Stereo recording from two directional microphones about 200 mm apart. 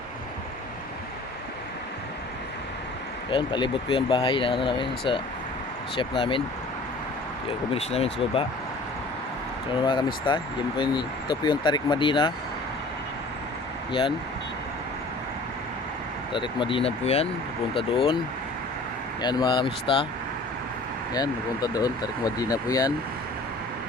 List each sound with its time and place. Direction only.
3.2 s speech: 25° left (ahead or behind)
7.7 s speech: 30° left (ahead or behind)
9.8 s speech: 25° left (ahead or behind)
16.3 s speech: 25° left (ahead or behind)
19.2 s speech: 20° left (ahead or behind)
21.1 s speech: 20° left (ahead or behind)